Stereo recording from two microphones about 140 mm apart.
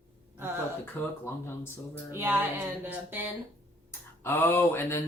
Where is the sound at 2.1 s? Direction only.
15° right (ahead or behind).